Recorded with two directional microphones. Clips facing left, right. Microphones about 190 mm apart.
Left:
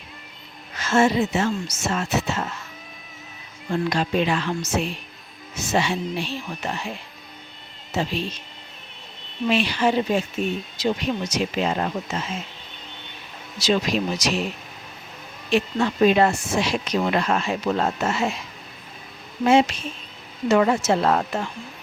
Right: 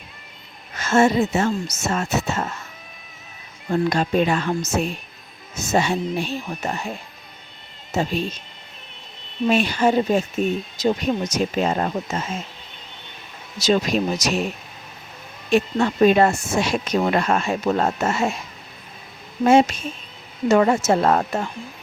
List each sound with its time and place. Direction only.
0.8 s speech: 45° right (ahead or behind)
3.7 s speech: 45° right (ahead or behind)
9.5 s speech: 45° right (ahead or behind)
13.6 s speech: 45° right (ahead or behind)
15.4 s speech: 45° right (ahead or behind)
19.5 s speech: 45° right (ahead or behind)